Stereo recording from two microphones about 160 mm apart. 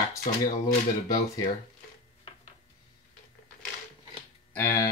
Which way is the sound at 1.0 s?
20° left (ahead or behind).